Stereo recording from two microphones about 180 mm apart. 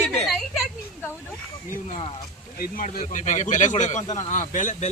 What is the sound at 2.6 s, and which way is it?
Speech, 50° left (ahead or behind).